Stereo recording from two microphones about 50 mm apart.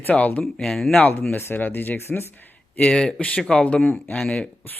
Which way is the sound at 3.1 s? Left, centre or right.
Left.